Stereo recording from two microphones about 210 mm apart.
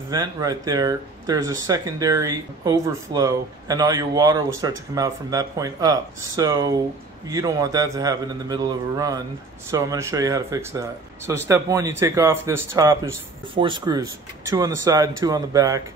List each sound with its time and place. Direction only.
0.1 s speech: 15° right (ahead or behind)